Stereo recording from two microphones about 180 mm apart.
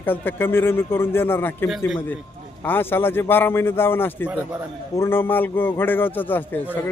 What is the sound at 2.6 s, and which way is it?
Speech, 10° left (ahead or behind).